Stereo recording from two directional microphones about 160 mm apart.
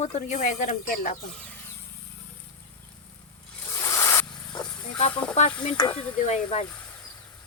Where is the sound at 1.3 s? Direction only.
10° left (ahead or behind).